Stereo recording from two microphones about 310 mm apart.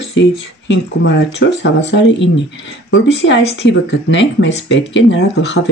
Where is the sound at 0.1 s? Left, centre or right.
Left.